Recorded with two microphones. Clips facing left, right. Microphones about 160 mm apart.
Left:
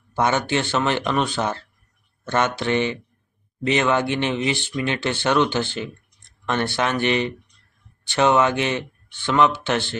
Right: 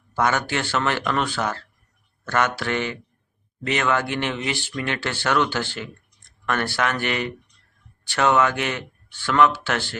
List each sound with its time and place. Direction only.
0.1 s speech: 20° left (ahead or behind)